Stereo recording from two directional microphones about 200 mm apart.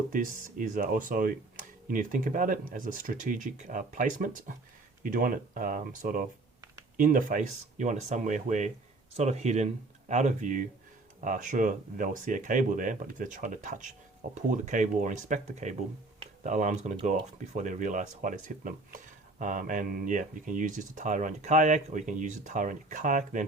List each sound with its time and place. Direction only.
0.1 s speech: 40° right (ahead or behind)